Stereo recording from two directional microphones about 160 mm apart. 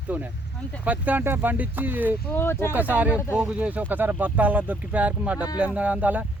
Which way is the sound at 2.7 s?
10° right (ahead or behind).